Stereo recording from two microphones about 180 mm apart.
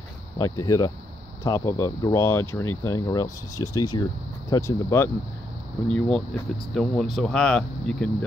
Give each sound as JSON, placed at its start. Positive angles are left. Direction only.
{"t": 0.4, "sound": "speech", "side_deg": 20}